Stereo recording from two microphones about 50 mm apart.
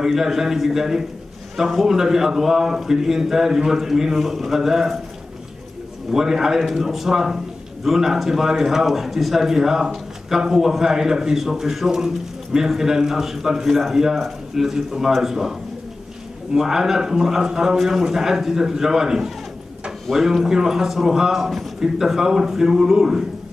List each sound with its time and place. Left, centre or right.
0.0 s a man's voice: centre
6.1 s a man's voice: centre
16.5 s a man's voice: centre